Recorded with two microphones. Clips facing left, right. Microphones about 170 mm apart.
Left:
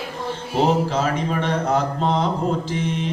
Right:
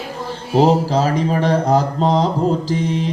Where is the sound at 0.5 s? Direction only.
35° right (ahead or behind).